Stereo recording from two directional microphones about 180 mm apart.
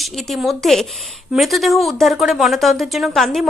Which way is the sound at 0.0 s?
Centre (ahead or behind).